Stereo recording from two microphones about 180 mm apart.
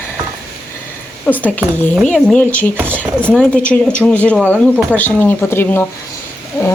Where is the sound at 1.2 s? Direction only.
10° left (ahead or behind).